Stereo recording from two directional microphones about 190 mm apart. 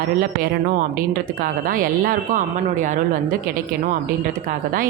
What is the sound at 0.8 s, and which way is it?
Speech, 50° right (ahead or behind).